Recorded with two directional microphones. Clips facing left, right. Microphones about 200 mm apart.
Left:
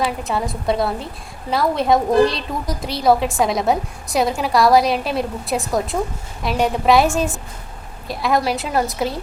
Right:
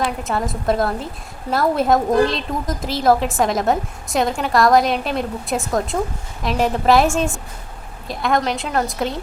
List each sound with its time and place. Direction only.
0.0 s a woman's voice: centre (ahead or behind)